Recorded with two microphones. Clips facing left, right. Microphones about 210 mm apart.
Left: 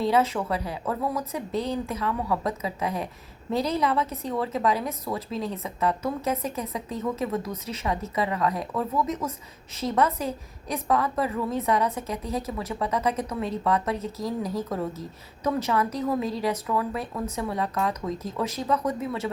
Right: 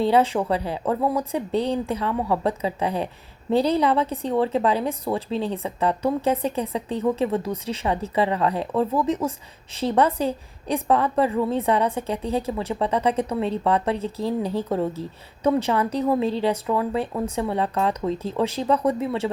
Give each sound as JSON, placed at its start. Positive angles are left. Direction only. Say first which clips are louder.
{"t": 0.0, "sound": "a woman's voice", "louder": "right 4 dB", "side_deg": -30}